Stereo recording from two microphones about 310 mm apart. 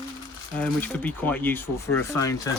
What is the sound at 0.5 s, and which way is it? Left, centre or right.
A man's voice, centre.